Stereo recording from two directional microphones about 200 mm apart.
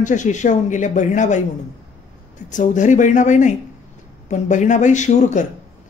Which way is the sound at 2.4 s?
40° left (ahead or behind).